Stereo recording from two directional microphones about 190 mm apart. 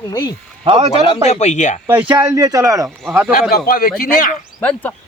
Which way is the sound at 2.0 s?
25° right (ahead or behind).